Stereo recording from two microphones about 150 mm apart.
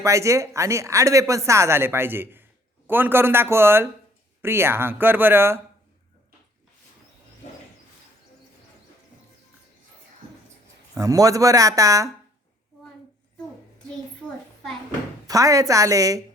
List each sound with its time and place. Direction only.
0.0 s a man's voice: 20° right (ahead or behind)
10.9 s speech: 20° right (ahead or behind)
15.3 s speech: 20° right (ahead or behind)